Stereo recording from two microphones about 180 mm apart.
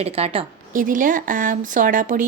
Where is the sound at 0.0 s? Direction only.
35° right (ahead or behind).